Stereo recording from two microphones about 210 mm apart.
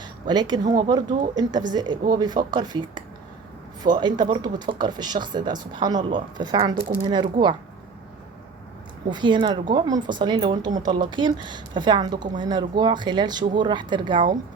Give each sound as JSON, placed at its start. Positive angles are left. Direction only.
{"t": 0.3, "sound": "a woman's voice", "side_deg": -20}
{"t": 9.0, "sound": "a woman's voice", "side_deg": -20}